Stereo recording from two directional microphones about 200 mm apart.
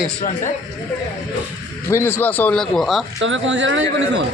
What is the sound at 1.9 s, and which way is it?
Speech, 10° left (ahead or behind).